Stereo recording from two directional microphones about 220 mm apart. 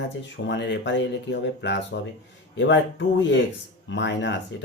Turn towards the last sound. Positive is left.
turn(degrees=55)  # may be behind; listen again after turning